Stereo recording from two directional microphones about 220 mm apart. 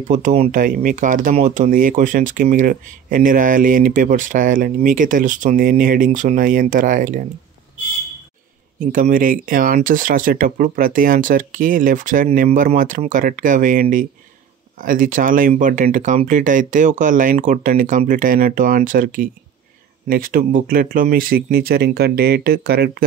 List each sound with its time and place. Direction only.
0.0 s speech: 35° right (ahead or behind)
8.7 s speech: 35° right (ahead or behind)